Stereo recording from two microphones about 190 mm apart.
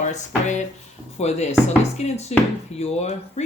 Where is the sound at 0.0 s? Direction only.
40° left (ahead or behind).